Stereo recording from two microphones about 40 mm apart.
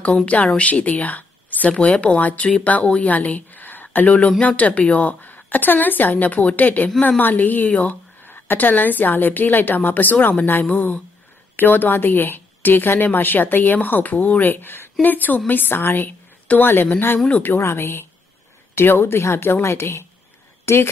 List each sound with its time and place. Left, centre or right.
0.1 s a woman's voice: left
3.1 s a woman's voice: left
8.2 s a woman's voice: left
16.1 s a sound: left
17.4 s a woman's voice: left